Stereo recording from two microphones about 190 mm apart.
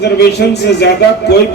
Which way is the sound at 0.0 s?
60° left (ahead or behind).